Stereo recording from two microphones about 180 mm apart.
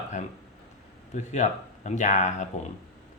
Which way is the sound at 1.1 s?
40° left (ahead or behind).